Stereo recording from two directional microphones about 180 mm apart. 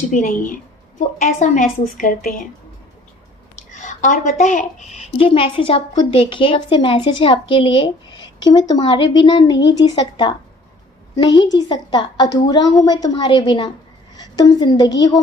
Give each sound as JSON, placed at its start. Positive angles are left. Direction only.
{"t": 0.1, "sound": "a woman's voice", "side_deg": 50}
{"t": 3.8, "sound": "a woman's voice", "side_deg": 45}
{"t": 11.5, "sound": "a woman's voice", "side_deg": 25}